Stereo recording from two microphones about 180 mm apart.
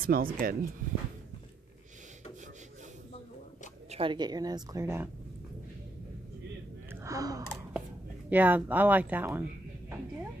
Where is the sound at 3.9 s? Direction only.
30° right (ahead or behind).